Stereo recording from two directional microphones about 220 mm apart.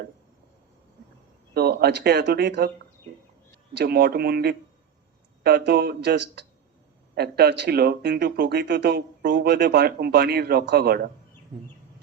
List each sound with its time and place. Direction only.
1.5 s a man's voice: 45° right (ahead or behind)
11.5 s bird: 25° right (ahead or behind)